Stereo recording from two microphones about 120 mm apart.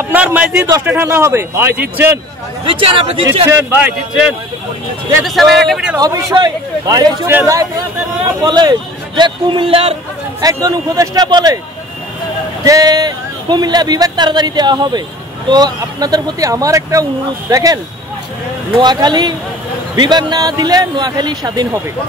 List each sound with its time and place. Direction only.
0.1 s a man's voice: 10° right (ahead or behind)
2.7 s speech: 50° right (ahead or behind)
3.4 s a man's voice: 20° right (ahead or behind)
5.2 s speech: centre (ahead or behind)
5.9 s speech: 30° right (ahead or behind)
7.2 s speech: 25° right (ahead or behind)
8.4 s speech: 35° right (ahead or behind); by 9.9 s 50° right (ahead or behind)
10.4 s speech: 30° right (ahead or behind)
12.6 s speech: 30° right (ahead or behind)
18.8 s speech: 35° right (ahead or behind)